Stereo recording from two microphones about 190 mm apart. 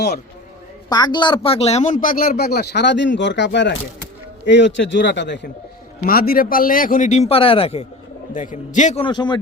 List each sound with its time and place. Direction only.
0.9 s a man's voice: 20° left (ahead or behind); by 5.5 s 65° left (ahead or behind)
6.1 s speech: 50° left (ahead or behind); by 7.9 s 30° left (ahead or behind)
8.3 s a man's voice: 40° left (ahead or behind)
9.0 s speech: 25° left (ahead or behind)